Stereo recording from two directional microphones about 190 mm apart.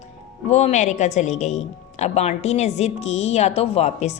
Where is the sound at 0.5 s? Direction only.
35° left (ahead or behind).